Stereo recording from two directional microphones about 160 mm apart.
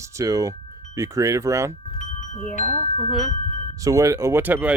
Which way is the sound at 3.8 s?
20° right (ahead or behind).